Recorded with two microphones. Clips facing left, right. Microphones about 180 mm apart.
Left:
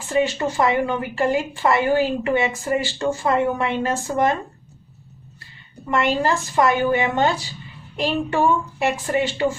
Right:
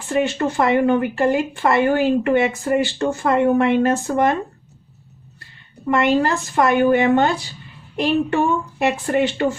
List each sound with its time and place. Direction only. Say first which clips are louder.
0.1 s speech: right 1 dB; 60° right (ahead or behind)
5.9 s speech: right 3 dB; 60° right (ahead or behind)